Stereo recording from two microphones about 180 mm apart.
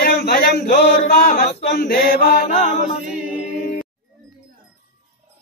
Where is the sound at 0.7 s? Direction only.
50° left (ahead or behind).